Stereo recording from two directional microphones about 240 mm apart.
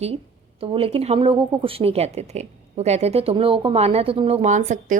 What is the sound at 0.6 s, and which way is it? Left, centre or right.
A woman's voice, right.